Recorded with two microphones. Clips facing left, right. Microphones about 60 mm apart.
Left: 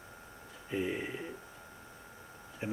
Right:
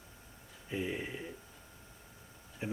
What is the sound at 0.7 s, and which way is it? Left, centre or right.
Speech, centre.